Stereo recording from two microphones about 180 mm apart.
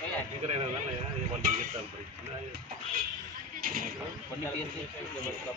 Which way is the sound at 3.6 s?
50° right (ahead or behind).